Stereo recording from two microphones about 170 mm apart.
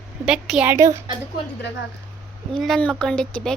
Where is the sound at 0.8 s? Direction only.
15° right (ahead or behind).